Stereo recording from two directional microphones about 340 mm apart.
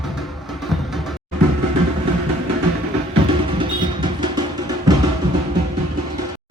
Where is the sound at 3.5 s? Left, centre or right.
Centre.